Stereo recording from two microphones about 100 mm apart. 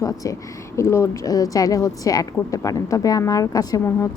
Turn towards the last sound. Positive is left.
turn(degrees=35)  # may be behind; listen again after turning